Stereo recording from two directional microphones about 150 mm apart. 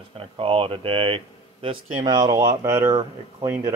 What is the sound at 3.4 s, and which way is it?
Speech, 20° right (ahead or behind).